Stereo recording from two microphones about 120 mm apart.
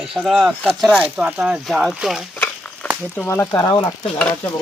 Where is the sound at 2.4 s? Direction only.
10° left (ahead or behind).